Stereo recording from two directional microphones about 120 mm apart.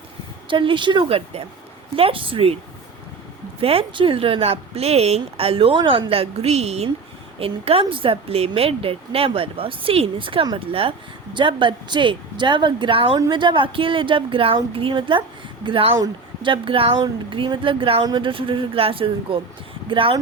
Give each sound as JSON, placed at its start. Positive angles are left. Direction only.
{"t": 0.4, "sound": "speech", "side_deg": -45}
{"t": 3.6, "sound": "speech", "side_deg": -50}
{"t": 13.1, "sound": "speech", "side_deg": -35}